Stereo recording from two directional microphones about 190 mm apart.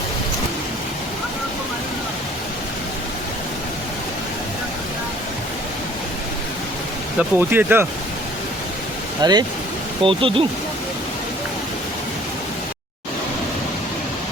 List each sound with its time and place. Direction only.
7.2 s speech: 10° right (ahead or behind)
9.2 s speech: 20° right (ahead or behind)